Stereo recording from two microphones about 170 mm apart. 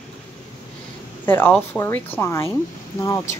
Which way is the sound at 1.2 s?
10° left (ahead or behind).